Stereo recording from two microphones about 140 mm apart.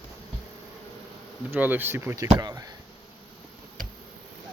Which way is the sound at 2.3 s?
30° right (ahead or behind).